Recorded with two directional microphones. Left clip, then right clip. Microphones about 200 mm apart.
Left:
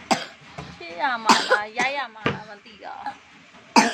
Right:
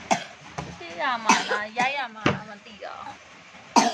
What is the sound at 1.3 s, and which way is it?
Speech, 50° left (ahead or behind).